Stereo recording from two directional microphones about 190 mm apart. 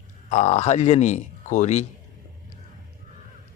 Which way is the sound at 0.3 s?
40° left (ahead or behind).